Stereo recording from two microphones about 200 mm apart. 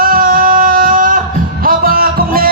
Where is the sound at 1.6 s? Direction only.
45° right (ahead or behind).